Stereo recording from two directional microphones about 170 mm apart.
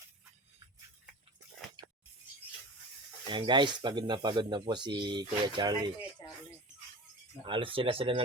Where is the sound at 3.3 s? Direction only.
25° right (ahead or behind).